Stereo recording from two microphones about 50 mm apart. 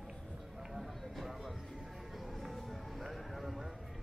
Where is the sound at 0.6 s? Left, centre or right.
Centre.